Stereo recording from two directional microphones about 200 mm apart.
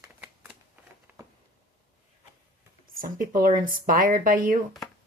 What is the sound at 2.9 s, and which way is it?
Speech, 45° right (ahead or behind).